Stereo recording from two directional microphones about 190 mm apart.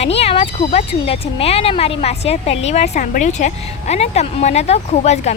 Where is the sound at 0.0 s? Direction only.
30° left (ahead or behind).